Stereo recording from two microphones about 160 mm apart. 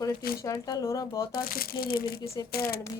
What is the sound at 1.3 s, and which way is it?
Speech, 65° left (ahead or behind).